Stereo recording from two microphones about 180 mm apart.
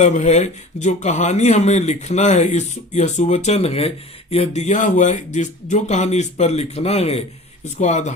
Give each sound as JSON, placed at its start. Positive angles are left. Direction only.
{"t": 0.0, "sound": "speech", "side_deg": 40}